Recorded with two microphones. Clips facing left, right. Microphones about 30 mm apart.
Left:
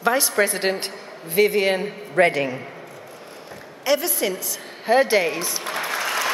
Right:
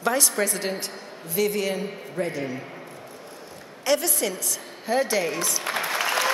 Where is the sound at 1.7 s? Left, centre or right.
Left.